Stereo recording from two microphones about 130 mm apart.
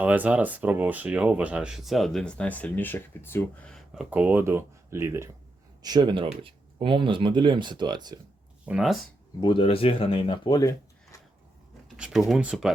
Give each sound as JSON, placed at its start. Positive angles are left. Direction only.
{"t": 0.0, "sound": "speech", "side_deg": -10}
{"t": 3.7, "sound": "a sound", "side_deg": 0}
{"t": 4.1, "sound": "speech", "side_deg": -10}
{"t": 5.8, "sound": "speech", "side_deg": -35}
{"t": 8.6, "sound": "speech", "side_deg": -5}
{"t": 9.4, "sound": "speech", "side_deg": 40}
{"t": 10.6, "sound": "a sound", "side_deg": 25}
{"t": 11.9, "sound": "speech", "side_deg": -5}